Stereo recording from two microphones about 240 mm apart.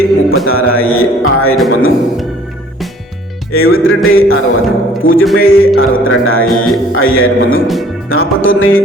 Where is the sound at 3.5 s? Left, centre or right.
Left.